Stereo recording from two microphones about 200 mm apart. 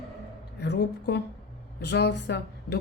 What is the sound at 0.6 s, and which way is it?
A woman's voice, 55° left (ahead or behind).